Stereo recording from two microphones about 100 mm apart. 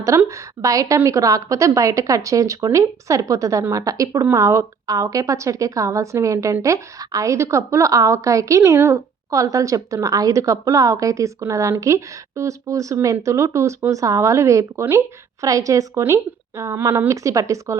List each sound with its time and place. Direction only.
0.3 s speech: 30° right (ahead or behind)